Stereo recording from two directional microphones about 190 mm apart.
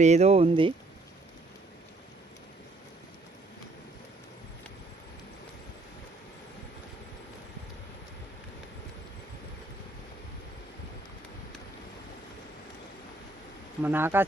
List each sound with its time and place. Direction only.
0.0 s speech: 35° right (ahead or behind)
13.8 s speech: 10° right (ahead or behind)